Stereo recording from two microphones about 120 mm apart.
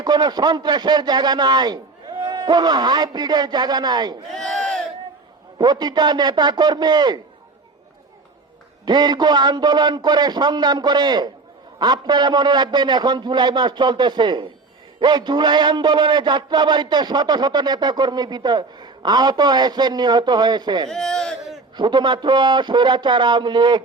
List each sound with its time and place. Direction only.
0.0 s a man's voice: 35° right (ahead or behind)
4.4 s crowd: 5° left (ahead or behind)
5.5 s a man's voice: 35° right (ahead or behind)
8.8 s a man's voice: 35° right (ahead or behind)
20.9 s a sound: 5° left (ahead or behind)
21.8 s a man's voice: 40° right (ahead or behind)